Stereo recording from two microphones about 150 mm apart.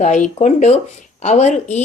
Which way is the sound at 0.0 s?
55° left (ahead or behind).